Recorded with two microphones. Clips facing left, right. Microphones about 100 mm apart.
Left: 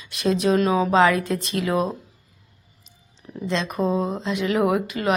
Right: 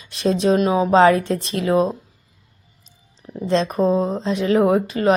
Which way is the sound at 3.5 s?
35° right (ahead or behind).